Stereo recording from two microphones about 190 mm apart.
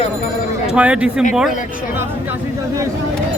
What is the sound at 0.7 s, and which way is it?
Speech, 5° right (ahead or behind).